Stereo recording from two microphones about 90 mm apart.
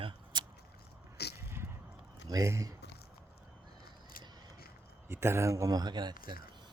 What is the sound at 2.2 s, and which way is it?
Speech, 40° right (ahead or behind).